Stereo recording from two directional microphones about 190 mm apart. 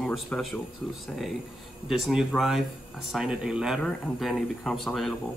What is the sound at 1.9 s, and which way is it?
Speech, centre (ahead or behind).